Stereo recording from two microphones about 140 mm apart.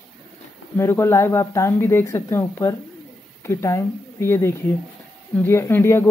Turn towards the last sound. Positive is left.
turn(degrees=15)  # may be behind; listen again after turning